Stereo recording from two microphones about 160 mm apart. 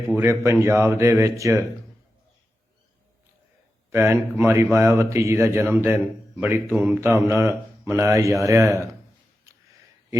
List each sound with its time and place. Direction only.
0.2 s a man's voice: 15° right (ahead or behind)
3.9 s a man's voice: 15° right (ahead or behind)